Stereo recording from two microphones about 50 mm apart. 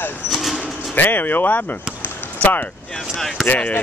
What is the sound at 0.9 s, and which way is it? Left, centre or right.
Speech, left.